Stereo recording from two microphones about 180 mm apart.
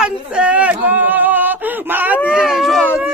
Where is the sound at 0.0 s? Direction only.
5° right (ahead or behind).